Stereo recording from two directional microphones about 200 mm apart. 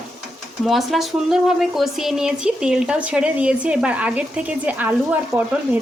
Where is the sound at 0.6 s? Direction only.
Centre (ahead or behind).